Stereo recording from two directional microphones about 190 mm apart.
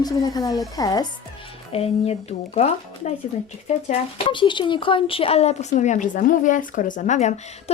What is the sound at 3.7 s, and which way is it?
Speech, 40° left (ahead or behind).